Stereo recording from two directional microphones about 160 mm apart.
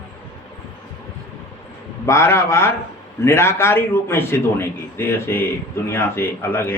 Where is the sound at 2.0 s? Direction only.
15° left (ahead or behind).